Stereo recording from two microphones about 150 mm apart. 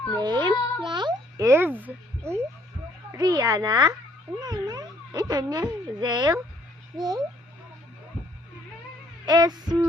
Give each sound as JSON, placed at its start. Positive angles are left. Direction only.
{"t": 0.2, "sound": "a child's voice", "side_deg": -30}
{"t": 1.5, "sound": "a child's voice", "side_deg": -15}
{"t": 9.2, "sound": "a child's voice", "side_deg": -25}